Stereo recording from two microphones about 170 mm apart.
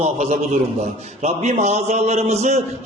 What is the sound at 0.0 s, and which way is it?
A man's voice, 40° right (ahead or behind).